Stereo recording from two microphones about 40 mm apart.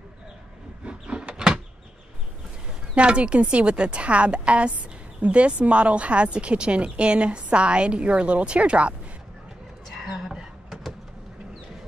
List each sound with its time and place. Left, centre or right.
0.8 s vehicle: right
2.9 s a woman's voice: right
9.9 s a sound: centre